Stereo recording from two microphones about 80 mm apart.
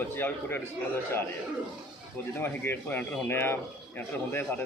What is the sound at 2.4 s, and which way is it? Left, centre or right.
Speech, left.